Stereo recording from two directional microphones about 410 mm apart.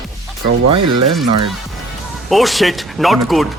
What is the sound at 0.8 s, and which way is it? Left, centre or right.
Speech, right.